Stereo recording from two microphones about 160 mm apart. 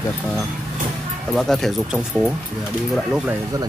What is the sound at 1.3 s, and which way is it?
Speech, centre (ahead or behind).